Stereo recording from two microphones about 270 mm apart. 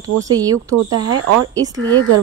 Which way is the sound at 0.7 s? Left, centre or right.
Right.